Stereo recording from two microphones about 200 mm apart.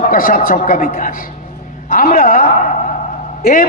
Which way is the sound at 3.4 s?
45° left (ahead or behind).